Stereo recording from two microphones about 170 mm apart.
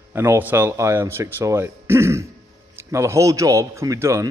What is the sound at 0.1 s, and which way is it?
Speech, 15° right (ahead or behind).